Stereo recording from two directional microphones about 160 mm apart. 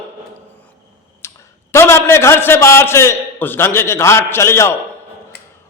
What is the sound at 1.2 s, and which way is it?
Clicking, 15° left (ahead or behind).